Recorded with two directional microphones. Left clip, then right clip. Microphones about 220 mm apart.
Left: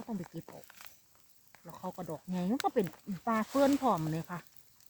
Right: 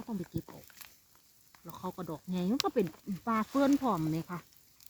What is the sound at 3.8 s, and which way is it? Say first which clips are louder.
Speech: left 1 dB; 25° left (ahead or behind).